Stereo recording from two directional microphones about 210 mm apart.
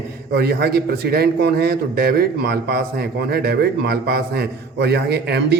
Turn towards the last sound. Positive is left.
turn(degrees=-50)  # may be behind; listen again after turning